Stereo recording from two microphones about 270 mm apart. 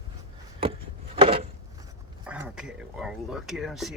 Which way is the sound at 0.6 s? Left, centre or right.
Centre.